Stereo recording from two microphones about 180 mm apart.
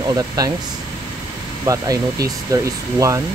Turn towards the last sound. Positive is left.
turn(degrees=-15)  # may be behind; listen again after turning